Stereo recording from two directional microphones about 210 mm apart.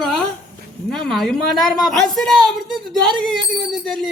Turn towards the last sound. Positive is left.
turn(degrees=0)  # may be behind; listen again after turning